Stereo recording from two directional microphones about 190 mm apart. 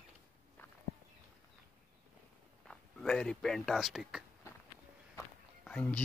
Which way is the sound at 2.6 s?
5° left (ahead or behind).